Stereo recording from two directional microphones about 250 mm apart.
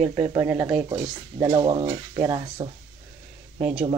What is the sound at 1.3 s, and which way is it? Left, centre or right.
Speech, centre.